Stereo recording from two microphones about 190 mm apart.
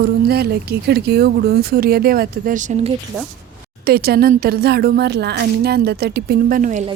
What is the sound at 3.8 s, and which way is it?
Speech, 55° right (ahead or behind).